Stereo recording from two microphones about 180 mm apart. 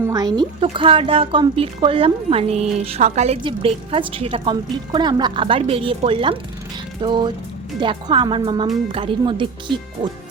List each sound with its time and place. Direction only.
0.0 s a woman's voice: 20° right (ahead or behind)